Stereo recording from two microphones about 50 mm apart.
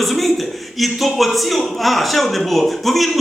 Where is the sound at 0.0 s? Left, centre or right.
Centre.